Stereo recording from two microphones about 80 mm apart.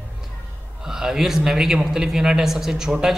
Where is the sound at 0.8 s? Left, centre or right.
Centre.